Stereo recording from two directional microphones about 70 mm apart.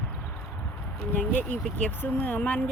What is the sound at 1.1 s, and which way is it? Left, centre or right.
Speech, left.